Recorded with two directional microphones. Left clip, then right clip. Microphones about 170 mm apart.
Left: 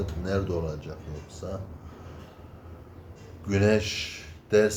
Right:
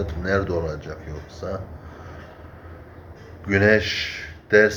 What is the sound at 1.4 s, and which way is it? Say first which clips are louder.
Speech: right 7 dB; 10° left (ahead or behind).